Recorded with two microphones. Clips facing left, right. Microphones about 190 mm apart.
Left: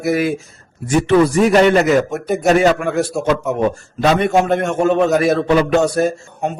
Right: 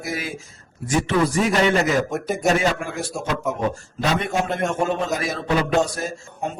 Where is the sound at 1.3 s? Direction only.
60° left (ahead or behind).